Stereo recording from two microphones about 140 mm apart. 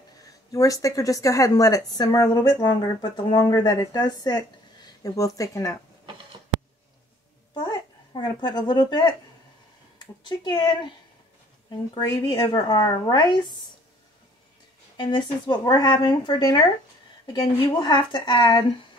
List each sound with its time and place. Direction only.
0.5 s a woman's voice: 25° left (ahead or behind)
7.5 s a sound: 30° left (ahead or behind)
10.2 s speech: 35° left (ahead or behind)
11.7 s a woman's voice: 30° left (ahead or behind)
15.0 s a woman's voice: 35° left (ahead or behind)